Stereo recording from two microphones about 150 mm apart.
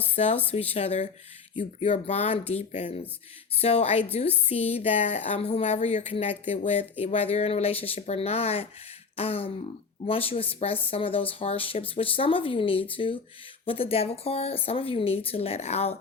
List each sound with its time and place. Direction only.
0.2 s a woman's voice: 45° left (ahead or behind)